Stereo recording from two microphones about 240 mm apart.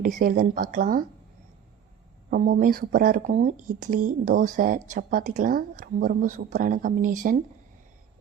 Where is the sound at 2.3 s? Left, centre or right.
Right.